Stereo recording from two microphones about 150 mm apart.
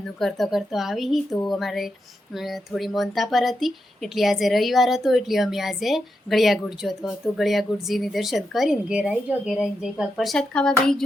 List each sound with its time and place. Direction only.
0.2 s speech: centre (ahead or behind)